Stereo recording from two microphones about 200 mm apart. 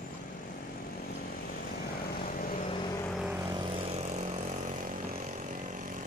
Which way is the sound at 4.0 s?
35° right (ahead or behind).